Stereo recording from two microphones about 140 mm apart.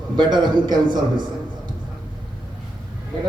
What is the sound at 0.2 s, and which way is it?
Speech, 35° right (ahead or behind).